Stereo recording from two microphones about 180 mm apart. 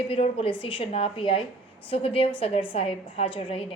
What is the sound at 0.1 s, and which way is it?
A woman's voice, 30° left (ahead or behind).